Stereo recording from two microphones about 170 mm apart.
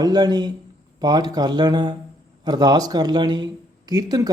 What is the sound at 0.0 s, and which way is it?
A man's voice, 25° right (ahead or behind).